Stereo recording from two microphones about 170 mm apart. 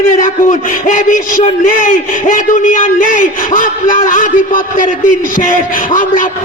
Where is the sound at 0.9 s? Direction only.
50° left (ahead or behind).